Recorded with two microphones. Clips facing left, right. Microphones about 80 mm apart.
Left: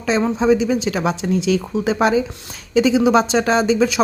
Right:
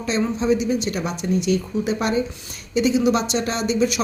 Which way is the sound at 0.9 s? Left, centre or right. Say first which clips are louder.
Left 4 dB; left.